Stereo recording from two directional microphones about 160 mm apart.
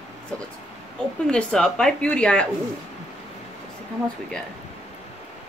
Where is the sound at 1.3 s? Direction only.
5° left (ahead or behind).